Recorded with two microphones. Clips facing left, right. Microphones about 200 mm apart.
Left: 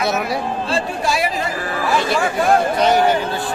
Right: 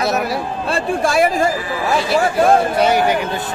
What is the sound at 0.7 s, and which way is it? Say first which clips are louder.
Speech: right 5 dB; 55° right (ahead or behind).